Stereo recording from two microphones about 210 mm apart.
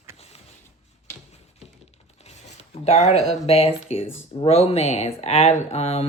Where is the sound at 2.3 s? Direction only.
30° left (ahead or behind).